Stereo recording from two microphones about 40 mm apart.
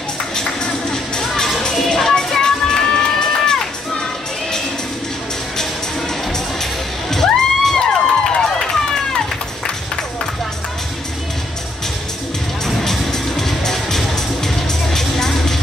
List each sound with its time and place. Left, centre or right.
1.2 s music: centre
1.8 s a sound: centre
6.6 s music: centre
12.6 s music: centre